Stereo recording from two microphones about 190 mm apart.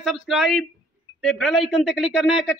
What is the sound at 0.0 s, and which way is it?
Speech, centre (ahead or behind).